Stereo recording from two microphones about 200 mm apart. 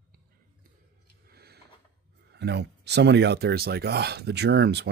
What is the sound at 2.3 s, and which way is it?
Speech, 55° right (ahead or behind).